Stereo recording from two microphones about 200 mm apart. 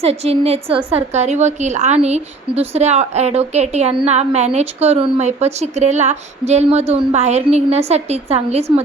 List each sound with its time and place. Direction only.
0.0 s a woman's voice: 30° right (ahead or behind)